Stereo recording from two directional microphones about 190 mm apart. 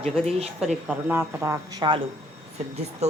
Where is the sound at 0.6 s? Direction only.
5° right (ahead or behind).